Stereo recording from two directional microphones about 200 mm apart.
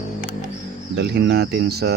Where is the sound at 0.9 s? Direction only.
55° right (ahead or behind).